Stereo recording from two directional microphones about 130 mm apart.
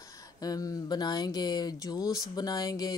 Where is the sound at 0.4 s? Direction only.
30° left (ahead or behind).